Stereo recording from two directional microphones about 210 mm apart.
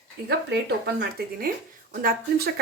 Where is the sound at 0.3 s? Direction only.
50° right (ahead or behind).